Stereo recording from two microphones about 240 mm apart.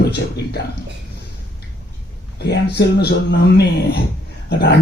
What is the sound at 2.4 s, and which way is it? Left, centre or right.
Speech, left.